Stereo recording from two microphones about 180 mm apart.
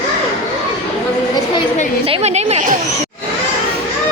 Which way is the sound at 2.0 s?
35° right (ahead or behind).